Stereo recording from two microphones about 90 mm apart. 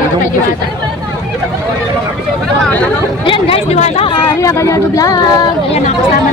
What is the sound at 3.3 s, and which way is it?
Speech, 85° left.